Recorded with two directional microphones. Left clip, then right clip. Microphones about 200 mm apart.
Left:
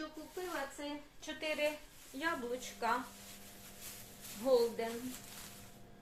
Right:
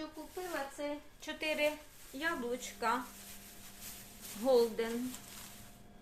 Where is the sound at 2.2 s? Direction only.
35° right (ahead or behind).